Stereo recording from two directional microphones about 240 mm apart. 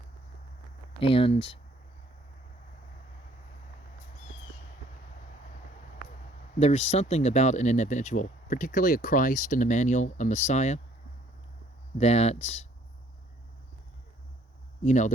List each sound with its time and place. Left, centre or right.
0.9 s speech: left
6.6 s speech: left
11.9 s speech: left
14.8 s speech: left